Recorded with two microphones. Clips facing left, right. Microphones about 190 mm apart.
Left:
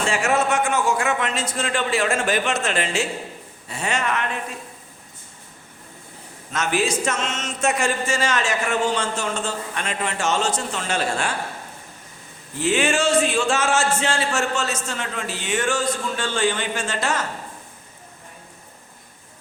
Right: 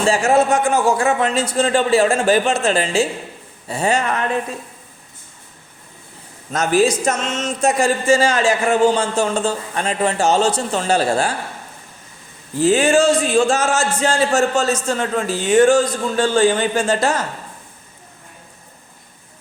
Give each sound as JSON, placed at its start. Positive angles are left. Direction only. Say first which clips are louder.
{"t": 0.0, "sound": "speech", "louder": "right 6 dB", "side_deg": -35}
{"t": 6.5, "sound": "speech", "louder": "right 7 dB", "side_deg": -40}
{"t": 12.5, "sound": "speech", "louder": "right 7 dB", "side_deg": -35}